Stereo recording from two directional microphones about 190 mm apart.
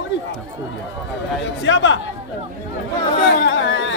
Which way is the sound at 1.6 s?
80° left.